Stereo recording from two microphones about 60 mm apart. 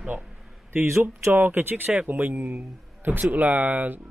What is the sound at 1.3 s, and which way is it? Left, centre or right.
Speech, right.